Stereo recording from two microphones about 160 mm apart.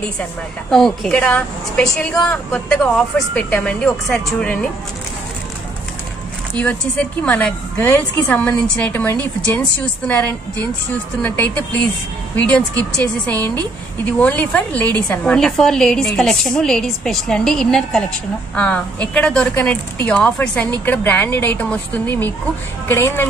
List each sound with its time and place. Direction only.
0.2 s a woman's voice: 5° left (ahead or behind)
6.5 s a woman's voice: 5° left (ahead or behind)
12.9 s a woman's voice: 10° left (ahead or behind)